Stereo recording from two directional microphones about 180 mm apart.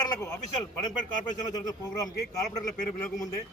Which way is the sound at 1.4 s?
20° left (ahead or behind).